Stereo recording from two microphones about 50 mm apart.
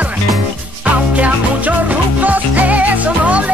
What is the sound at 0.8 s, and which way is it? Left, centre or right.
Music, right.